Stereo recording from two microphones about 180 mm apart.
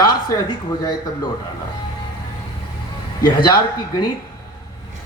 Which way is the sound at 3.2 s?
25° left (ahead or behind).